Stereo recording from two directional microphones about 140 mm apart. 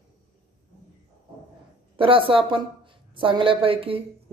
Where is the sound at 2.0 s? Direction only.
40° right (ahead or behind).